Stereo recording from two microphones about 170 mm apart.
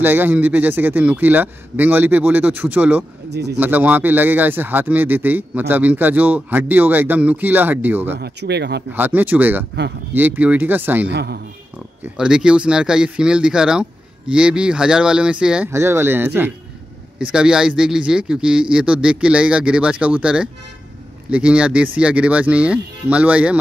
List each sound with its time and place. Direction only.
0.0 s a man's voice: 10° right (ahead or behind)
3.3 s speech: 80° right
3.5 s a man's voice: 10° right (ahead or behind)
8.2 s speech: 80° right
8.9 s a man's voice: 10° right (ahead or behind)
11.1 s speech: 80° right
12.0 s a man's voice: 5° right (ahead or behind)